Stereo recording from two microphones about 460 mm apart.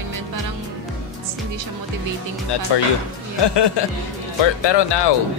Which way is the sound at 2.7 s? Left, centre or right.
Left.